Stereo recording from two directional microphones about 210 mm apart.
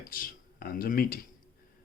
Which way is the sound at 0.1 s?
45° left (ahead or behind).